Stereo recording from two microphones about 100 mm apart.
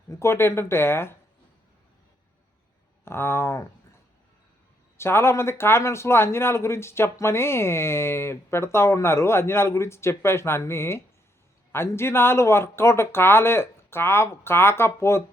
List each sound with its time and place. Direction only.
0.1 s a man's voice: 25° left (ahead or behind)
3.0 s a man's voice: 25° left (ahead or behind)
4.9 s a man's voice: 25° left (ahead or behind)